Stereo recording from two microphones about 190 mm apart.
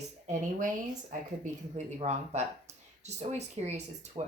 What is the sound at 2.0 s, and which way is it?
A woman's voice, 35° right (ahead or behind).